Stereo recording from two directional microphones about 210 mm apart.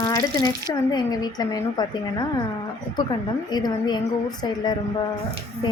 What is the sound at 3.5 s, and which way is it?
Speech, 20° left (ahead or behind).